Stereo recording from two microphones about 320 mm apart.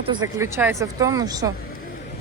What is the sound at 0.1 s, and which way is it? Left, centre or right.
A woman's voice, centre.